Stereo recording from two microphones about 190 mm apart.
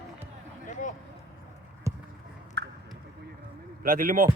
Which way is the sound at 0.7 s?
40° left (ahead or behind).